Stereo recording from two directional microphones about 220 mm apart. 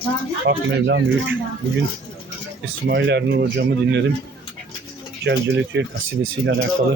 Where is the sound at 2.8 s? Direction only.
50° right (ahead or behind).